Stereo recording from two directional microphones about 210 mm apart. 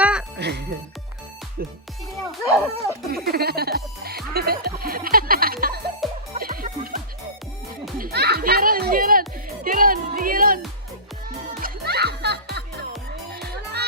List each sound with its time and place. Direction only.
0.0 s music: 5° right (ahead or behind)
0.3 s speech: 55° right (ahead or behind)
2.4 s speech: 15° left (ahead or behind)
3.2 s music: 45° right (ahead or behind)
7.9 s music: 45° right (ahead or behind)
11.6 s music: 50° right (ahead or behind)